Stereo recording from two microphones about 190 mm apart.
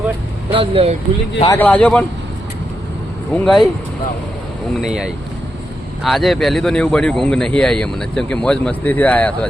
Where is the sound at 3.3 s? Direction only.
Centre (ahead or behind).